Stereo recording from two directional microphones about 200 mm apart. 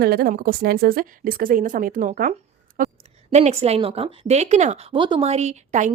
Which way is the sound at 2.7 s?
35° right (ahead or behind).